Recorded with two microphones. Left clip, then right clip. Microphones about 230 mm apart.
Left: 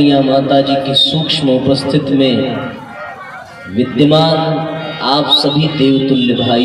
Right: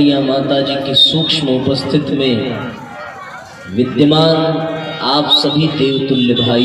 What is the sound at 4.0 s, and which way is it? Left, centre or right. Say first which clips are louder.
A man's voice: left 1 dB; left.